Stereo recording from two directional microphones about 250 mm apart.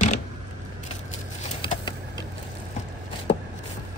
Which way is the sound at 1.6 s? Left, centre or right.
Centre.